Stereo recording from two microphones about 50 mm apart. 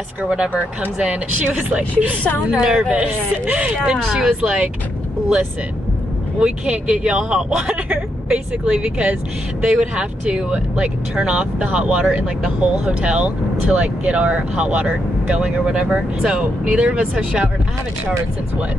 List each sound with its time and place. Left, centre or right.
0.2 s a woman's voice: centre
2.9 s speech: right
6.4 s speech: right
15.4 s a woman's voice: centre